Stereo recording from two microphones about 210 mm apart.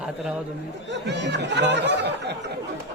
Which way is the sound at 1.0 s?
55° right (ahead or behind).